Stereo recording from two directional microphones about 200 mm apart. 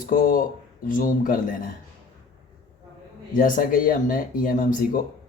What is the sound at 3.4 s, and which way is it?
Speech, 45° left (ahead or behind).